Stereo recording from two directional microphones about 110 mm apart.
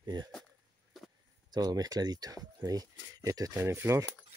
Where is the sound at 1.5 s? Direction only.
35° right (ahead or behind).